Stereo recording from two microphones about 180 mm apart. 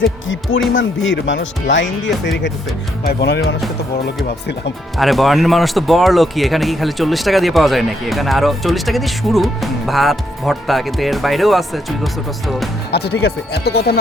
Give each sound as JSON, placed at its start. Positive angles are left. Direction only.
{"t": 0.7, "sound": "speech", "side_deg": 90}
{"t": 3.0, "sound": "speech", "side_deg": 65}
{"t": 4.9, "sound": "speech", "side_deg": 0}
{"t": 12.9, "sound": "speech", "side_deg": 65}